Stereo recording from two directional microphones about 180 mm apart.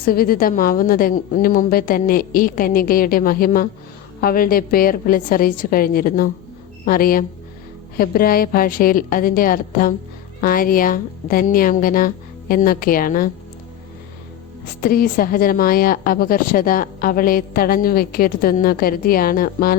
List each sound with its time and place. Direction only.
0.0 s a woman's voice: 55° left (ahead or behind)
14.8 s a woman's voice: 55° left (ahead or behind)